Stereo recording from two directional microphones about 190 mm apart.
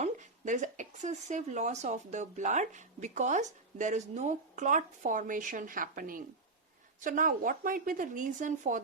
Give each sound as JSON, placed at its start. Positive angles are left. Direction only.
{"t": 0.0, "sound": "speech", "side_deg": -40}